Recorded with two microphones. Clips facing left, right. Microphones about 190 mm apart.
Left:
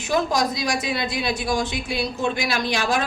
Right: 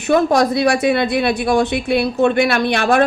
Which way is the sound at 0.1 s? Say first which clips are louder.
Right 8 dB; 65° right (ahead or behind).